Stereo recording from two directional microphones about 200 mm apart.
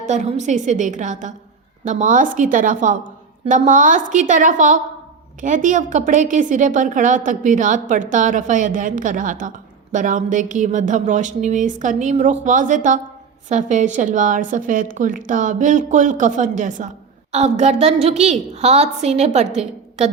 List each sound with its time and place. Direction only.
0.0 s a woman's voice: 35° right (ahead or behind)